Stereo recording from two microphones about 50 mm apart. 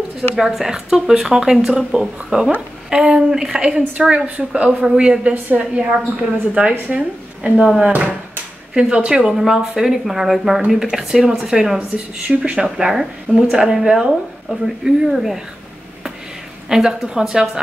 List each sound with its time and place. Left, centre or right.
0.4 s speech: centre
2.3 s a woman's voice: right
8.7 s speech: centre
9.3 s speech: centre
13.5 s speech: centre
16.6 s speech: centre